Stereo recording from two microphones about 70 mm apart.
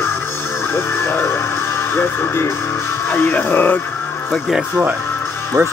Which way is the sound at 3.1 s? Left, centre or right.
Left.